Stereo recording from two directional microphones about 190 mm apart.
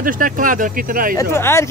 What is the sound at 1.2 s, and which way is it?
Speech, 15° left (ahead or behind).